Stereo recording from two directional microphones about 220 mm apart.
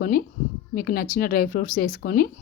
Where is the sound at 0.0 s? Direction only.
40° left (ahead or behind).